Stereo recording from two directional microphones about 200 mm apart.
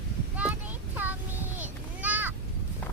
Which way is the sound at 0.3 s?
10° right (ahead or behind).